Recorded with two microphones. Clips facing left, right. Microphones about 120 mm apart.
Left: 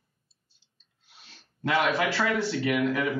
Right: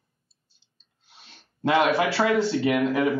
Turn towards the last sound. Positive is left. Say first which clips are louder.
# right 4 dB
turn(degrees=-25)  # may be behind; listen again after turning